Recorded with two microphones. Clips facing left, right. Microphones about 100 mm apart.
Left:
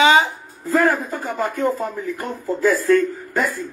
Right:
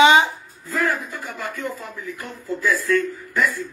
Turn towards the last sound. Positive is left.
turn(degrees=45)  # may be behind; listen again after turning